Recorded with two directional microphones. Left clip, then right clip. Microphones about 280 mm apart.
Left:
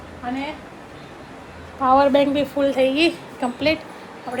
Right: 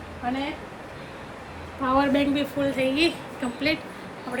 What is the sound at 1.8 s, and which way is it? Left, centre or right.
A woman's voice, centre.